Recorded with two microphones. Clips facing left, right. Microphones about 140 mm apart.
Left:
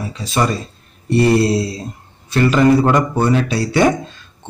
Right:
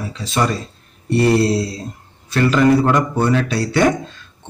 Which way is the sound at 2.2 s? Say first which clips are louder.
Left 1 dB; 20° left (ahead or behind).